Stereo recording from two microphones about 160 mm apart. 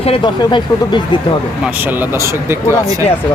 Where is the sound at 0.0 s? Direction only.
30° left (ahead or behind).